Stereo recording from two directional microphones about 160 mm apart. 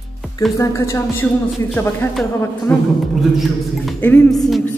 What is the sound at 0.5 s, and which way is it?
Music, 20° left (ahead or behind).